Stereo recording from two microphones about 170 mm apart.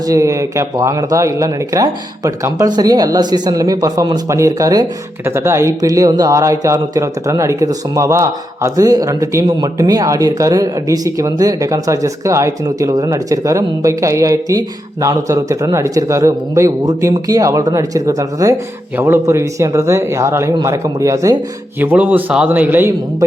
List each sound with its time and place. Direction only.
0.1 s speech: 20° right (ahead or behind)